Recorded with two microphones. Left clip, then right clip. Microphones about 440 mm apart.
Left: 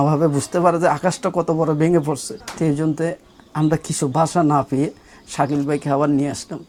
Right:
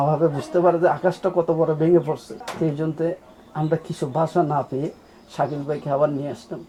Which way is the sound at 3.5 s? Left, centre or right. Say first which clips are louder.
Left 3 dB; left.